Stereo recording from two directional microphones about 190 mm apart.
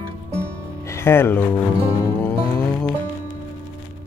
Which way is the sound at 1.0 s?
10° left (ahead or behind).